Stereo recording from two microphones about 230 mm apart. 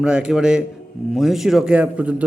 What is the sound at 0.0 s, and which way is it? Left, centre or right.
A man's voice, centre.